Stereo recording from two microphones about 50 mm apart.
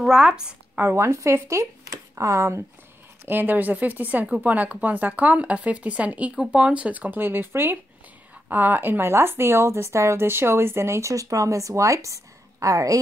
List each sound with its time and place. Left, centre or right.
0.0 s a woman's voice: centre
0.9 s speech: right
2.1 s speech: right
3.3 s speech: right
7.2 s speech: right
8.5 s speech: right
10.2 s speech: right